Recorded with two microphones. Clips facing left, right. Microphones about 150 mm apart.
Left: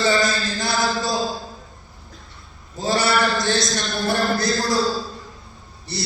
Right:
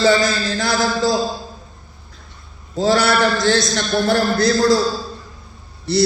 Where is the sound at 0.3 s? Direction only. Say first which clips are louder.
Right 3 dB; centre (ahead or behind).